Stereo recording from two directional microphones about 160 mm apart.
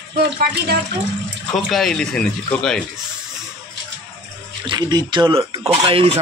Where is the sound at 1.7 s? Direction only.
5° left (ahead or behind).